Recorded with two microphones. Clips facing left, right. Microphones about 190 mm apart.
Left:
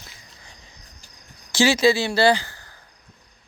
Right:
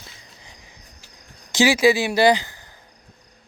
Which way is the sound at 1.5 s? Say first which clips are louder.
Right 1 dB; 15° right (ahead or behind).